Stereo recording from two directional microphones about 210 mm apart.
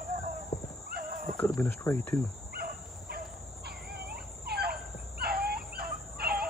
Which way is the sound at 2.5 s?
45° right (ahead or behind).